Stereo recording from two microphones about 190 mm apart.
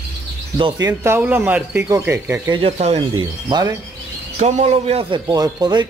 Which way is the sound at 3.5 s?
20° right (ahead or behind).